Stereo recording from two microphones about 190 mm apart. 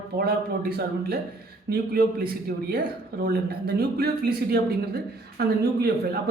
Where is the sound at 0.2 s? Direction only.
55° right (ahead or behind).